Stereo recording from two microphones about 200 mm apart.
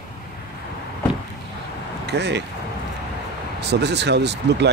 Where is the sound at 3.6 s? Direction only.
55° right (ahead or behind).